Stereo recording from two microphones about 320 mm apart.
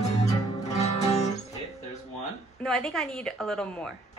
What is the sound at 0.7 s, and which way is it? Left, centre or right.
Music, centre.